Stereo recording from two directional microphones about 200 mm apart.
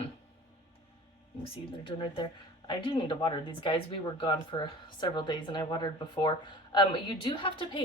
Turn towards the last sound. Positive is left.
turn(degrees=25)  # may be behind; listen again after turning